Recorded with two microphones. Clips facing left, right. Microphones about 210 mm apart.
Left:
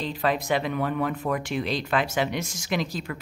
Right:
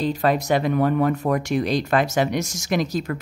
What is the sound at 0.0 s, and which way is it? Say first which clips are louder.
Speech: right 5 dB; 45° right (ahead or behind).